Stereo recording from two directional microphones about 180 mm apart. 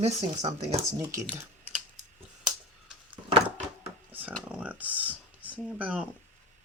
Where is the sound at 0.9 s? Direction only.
15° right (ahead or behind).